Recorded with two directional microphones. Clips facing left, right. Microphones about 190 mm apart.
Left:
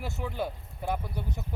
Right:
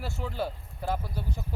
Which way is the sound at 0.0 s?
15° left (ahead or behind).